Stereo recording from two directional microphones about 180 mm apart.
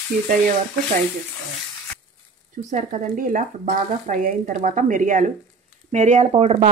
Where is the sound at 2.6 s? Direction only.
45° right (ahead or behind).